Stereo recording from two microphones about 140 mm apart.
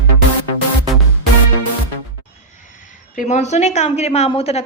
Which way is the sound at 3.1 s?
60° left (ahead or behind).